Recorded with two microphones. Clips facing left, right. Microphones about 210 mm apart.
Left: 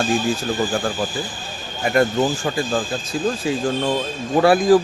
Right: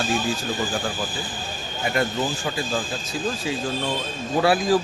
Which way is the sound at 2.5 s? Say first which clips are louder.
Left 5 dB; 50° left (ahead or behind).